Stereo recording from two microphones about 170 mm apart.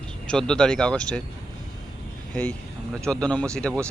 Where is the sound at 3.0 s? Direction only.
5° left (ahead or behind).